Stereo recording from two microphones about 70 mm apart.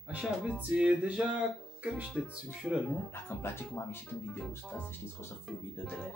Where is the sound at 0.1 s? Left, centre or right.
Centre.